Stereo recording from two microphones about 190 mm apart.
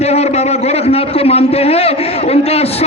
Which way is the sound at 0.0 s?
35° left (ahead or behind).